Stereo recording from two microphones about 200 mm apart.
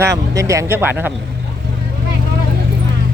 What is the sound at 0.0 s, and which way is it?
Speech, 15° right (ahead or behind).